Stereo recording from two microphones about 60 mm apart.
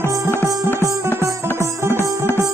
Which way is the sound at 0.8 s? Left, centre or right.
Right.